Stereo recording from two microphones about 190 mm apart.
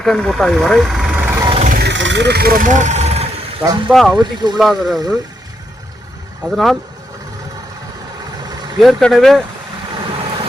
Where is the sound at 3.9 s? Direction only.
Centre (ahead or behind).